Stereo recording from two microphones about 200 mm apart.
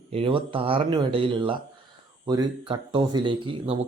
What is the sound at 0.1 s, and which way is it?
Speech, 25° right (ahead or behind).